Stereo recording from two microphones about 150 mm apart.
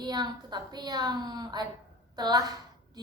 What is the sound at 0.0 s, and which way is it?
A woman's voice, 30° right (ahead or behind).